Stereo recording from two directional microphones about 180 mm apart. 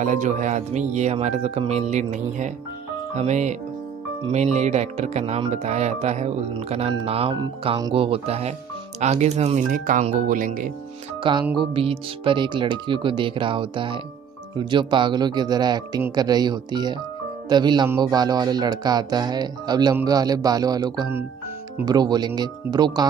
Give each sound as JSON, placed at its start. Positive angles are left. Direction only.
{"t": 0.0, "sound": "speech", "side_deg": -45}
{"t": 11.5, "sound": "speech", "side_deg": -30}